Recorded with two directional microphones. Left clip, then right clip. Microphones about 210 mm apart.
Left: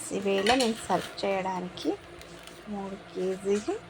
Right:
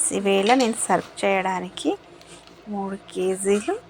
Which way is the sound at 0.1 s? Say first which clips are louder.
Right 6 dB; 20° right (ahead or behind).